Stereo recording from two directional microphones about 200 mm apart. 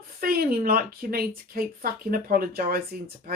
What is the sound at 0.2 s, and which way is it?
Speech, 50° right (ahead or behind).